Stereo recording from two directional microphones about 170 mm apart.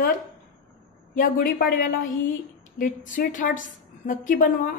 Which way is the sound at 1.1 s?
55° left (ahead or behind).